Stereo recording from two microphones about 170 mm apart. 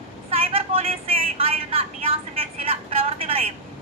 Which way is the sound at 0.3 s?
35° right (ahead or behind).